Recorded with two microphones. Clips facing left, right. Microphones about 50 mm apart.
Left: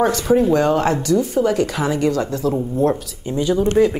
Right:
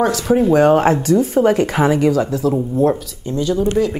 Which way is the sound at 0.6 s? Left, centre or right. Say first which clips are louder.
Right 5 dB; right.